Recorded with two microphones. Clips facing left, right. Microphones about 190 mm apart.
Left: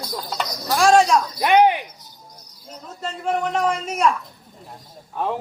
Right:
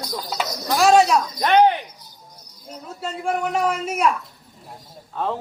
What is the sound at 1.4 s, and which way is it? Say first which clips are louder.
Speech: even; 10° left (ahead or behind).